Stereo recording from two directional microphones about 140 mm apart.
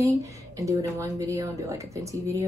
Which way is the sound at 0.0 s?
25° right (ahead or behind).